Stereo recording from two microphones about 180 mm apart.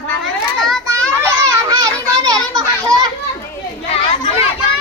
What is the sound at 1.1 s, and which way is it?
Children playing, 15° right (ahead or behind).